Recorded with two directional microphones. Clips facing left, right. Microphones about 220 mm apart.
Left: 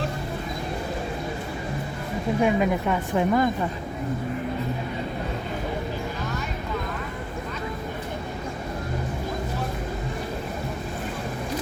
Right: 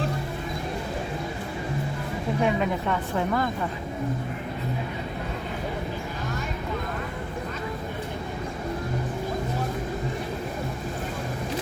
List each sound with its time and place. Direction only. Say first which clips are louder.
2.4 s a woman's voice: left 3 dB; 10° left (ahead or behind)